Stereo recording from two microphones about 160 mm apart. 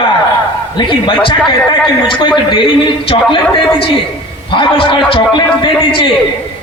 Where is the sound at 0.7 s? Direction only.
30° left (ahead or behind).